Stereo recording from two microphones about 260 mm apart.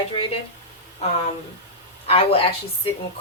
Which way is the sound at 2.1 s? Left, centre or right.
Left.